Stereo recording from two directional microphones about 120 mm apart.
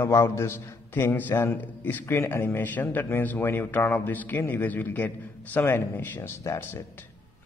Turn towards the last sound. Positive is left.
turn(degrees=20)  # may be behind; listen again after turning